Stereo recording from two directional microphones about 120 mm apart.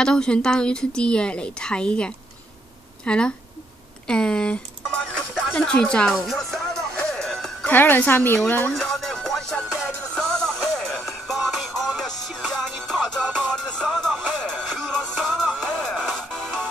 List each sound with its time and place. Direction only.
0.0 s speech: 5° left (ahead or behind)
5.4 s music: 5° left (ahead or behind)
7.7 s speech: 15° left (ahead or behind)
8.7 s music: centre (ahead or behind)